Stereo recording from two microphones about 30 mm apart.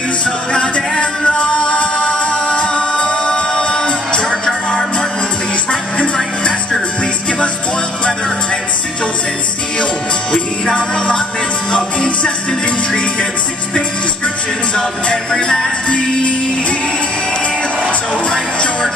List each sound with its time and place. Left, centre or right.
0.2 s music: left
10.7 s music: left
15.0 s music: left
15.9 s music: left
18.3 s music: left